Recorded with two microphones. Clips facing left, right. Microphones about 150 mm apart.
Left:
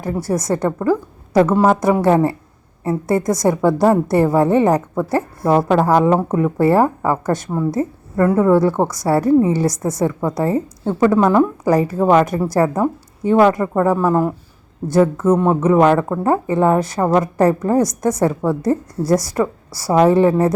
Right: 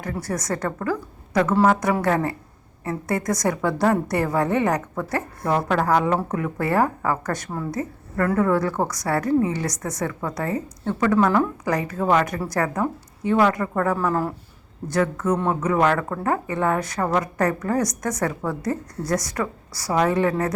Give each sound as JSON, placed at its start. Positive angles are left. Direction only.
{"t": 0.0, "sound": "speech", "side_deg": 25}